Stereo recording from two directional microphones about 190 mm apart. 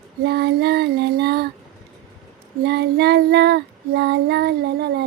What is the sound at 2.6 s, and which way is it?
Child singing, 60° right (ahead or behind).